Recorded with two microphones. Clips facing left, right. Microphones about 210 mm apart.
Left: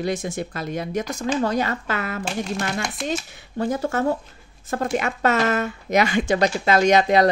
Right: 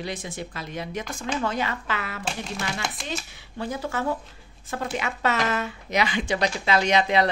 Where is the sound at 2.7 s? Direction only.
Centre (ahead or behind).